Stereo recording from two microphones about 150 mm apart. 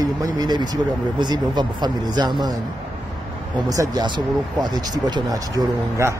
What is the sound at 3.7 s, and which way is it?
Speech, 25° right (ahead or behind).